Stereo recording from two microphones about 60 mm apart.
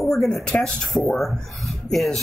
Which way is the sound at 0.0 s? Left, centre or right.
Centre.